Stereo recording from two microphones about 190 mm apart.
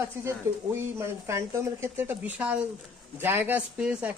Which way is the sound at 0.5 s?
15° right (ahead or behind).